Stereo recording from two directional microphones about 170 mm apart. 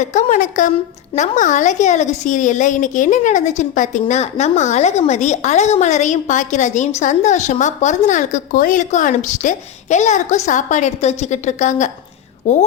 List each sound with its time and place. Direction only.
0.0 s a woman's voice: 45° left (ahead or behind)